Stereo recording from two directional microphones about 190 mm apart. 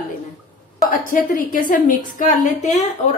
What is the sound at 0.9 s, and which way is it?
A woman's voice, 45° left (ahead or behind).